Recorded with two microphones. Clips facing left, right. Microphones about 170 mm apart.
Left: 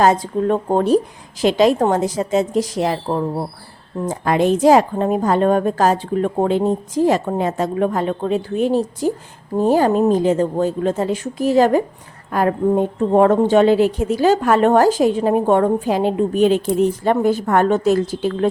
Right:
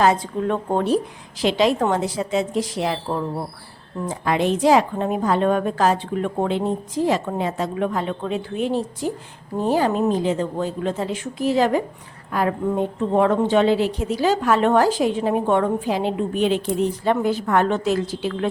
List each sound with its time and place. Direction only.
0.0 s a woman's voice: 40° left (ahead or behind)